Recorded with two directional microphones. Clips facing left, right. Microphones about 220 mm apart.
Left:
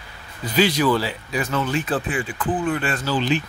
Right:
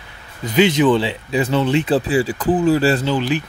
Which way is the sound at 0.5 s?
20° right (ahead or behind).